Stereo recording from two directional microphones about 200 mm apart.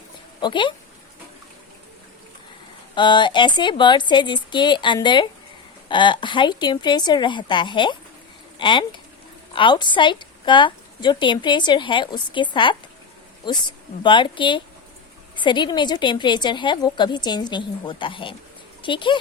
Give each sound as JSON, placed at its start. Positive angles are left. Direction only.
{"t": 0.4, "sound": "a woman's voice", "side_deg": 25}
{"t": 2.9, "sound": "a woman's voice", "side_deg": 25}